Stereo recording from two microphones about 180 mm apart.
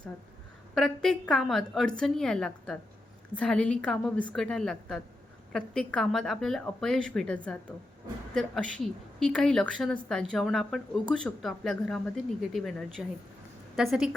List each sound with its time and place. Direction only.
0.7 s a woman's voice: centre (ahead or behind)